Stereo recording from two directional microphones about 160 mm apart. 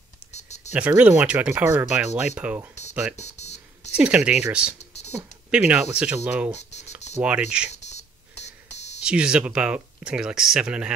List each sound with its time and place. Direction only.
0.3 s a sound: 45° left (ahead or behind)
0.7 s speech: 10° right (ahead or behind)
2.9 s music: 10° right (ahead or behind)
3.2 s music: 45° left (ahead or behind)
3.9 s speech: 10° right (ahead or behind)
6.6 s a sound: 45° left (ahead or behind)
7.2 s speech: 5° right (ahead or behind)
7.7 s a sound: 45° left (ahead or behind)
8.5 s buzzer: 45° left (ahead or behind)
9.0 s speech: 5° right (ahead or behind)